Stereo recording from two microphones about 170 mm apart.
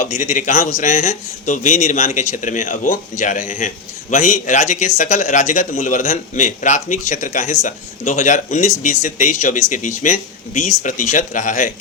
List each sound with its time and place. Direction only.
0.0 s a man's voice: 45° left (ahead or behind)